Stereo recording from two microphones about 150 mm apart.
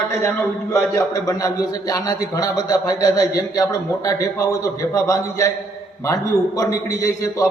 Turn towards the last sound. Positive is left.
turn(degrees=20)  # may be behind; listen again after turning